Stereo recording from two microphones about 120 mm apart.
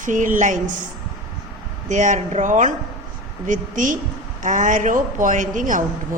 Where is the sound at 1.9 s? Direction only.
90° right.